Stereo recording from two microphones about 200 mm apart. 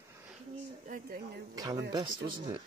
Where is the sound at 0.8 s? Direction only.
45° right (ahead or behind).